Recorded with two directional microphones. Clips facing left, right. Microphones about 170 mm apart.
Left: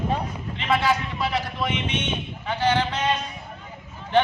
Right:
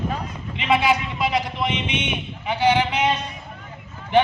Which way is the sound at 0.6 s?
15° right (ahead or behind).